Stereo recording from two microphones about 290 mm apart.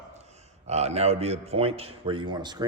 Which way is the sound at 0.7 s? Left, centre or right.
Right.